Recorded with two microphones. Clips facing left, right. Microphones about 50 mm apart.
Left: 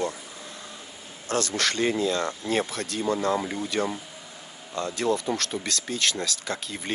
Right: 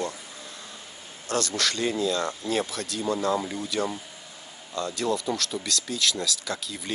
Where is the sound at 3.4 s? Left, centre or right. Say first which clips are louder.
Left 2 dB; centre.